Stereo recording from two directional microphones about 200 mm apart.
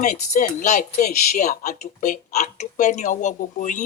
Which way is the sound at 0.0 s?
40° left (ahead or behind).